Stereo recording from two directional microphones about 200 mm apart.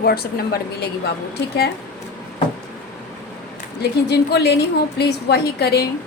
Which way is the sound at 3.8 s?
55° left (ahead or behind).